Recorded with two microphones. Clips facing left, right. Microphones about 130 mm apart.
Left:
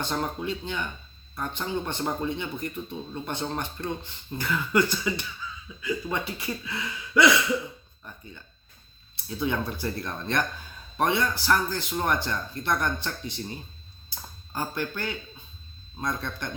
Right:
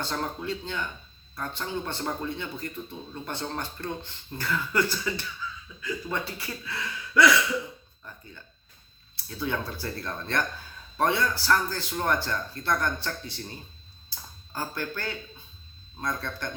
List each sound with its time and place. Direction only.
0.0 s a man's voice: 20° left (ahead or behind)
5.4 s slap: 20° left (ahead or behind)
5.8 s speech: 15° left (ahead or behind)
9.1 s a man's voice: 20° left (ahead or behind)
14.5 s a man's voice: 15° left (ahead or behind)